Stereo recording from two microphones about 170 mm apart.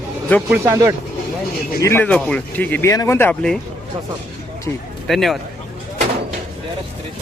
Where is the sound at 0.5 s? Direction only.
15° right (ahead or behind).